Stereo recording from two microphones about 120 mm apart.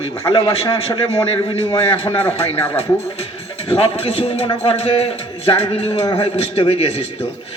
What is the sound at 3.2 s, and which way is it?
A man's voice, 60° left (ahead or behind).